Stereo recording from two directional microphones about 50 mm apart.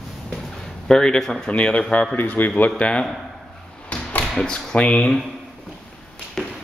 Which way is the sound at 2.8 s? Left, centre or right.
Left.